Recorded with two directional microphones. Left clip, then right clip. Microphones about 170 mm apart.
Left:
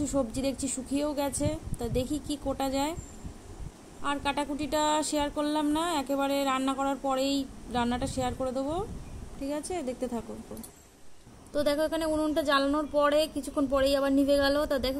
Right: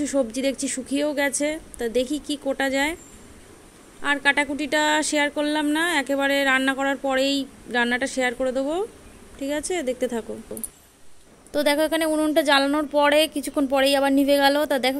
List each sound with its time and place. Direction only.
0.0 s speech: 15° right (ahead or behind)
4.0 s speech: 15° right (ahead or behind)
11.5 s a woman's voice: 20° right (ahead or behind)